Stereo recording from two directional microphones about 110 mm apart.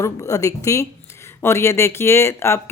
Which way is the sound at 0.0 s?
30° left (ahead or behind).